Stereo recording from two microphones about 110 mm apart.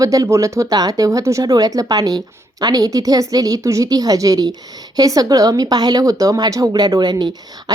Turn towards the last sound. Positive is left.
turn(degrees=-40)  # may be behind; listen again after turning